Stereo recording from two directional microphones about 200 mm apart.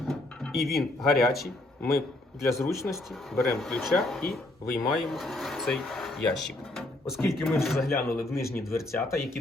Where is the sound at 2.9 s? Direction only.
Centre (ahead or behind).